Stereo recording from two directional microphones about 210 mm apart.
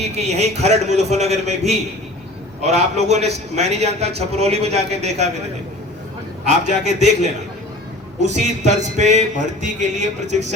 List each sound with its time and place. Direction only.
0.0 s a man's voice: 30° right (ahead or behind)
6.4 s a man's voice: 35° right (ahead or behind)